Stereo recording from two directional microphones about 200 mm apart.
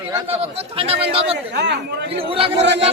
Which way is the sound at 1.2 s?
60° right (ahead or behind).